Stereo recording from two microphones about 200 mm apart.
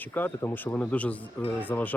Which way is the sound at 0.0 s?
10° left (ahead or behind).